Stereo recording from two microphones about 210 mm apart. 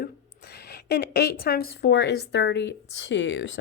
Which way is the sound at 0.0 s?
50° left (ahead or behind).